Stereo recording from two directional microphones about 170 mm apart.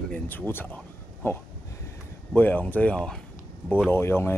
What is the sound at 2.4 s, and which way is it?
A man's voice, 10° left (ahead or behind).